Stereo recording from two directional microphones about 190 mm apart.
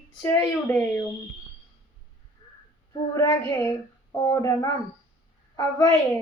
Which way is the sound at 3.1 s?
15° left (ahead or behind).